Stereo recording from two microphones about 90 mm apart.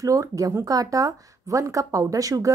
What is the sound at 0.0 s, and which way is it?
Speech, 40° right (ahead or behind).